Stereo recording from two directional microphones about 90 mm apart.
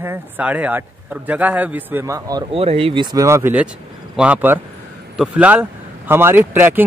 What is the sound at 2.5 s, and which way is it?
Speech, 90° right.